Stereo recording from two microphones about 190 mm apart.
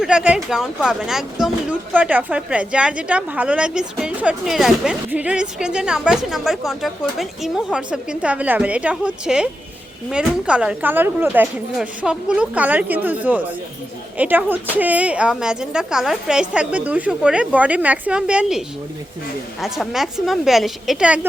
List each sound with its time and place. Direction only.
0.0 s a woman's voice: 5° right (ahead or behind)